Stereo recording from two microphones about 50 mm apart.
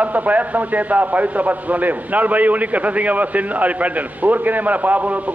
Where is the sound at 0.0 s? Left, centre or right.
Right.